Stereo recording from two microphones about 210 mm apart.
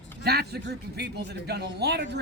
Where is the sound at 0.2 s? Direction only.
50° right (ahead or behind).